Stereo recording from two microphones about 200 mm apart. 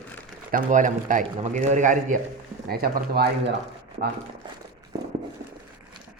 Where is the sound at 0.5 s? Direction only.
40° right (ahead or behind).